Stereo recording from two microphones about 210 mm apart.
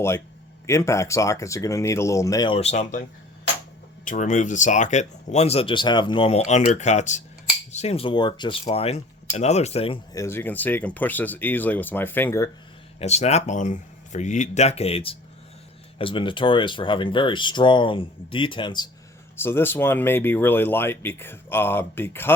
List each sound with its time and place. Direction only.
0.7 s speech: 15° left (ahead or behind)
2.6 s speech: 30° left (ahead or behind)
4.0 s speech: 35° left (ahead or behind); by 12.5 s 10° left (ahead or behind)
13.0 s speech: 30° left (ahead or behind)
19.4 s speech: 10° left (ahead or behind)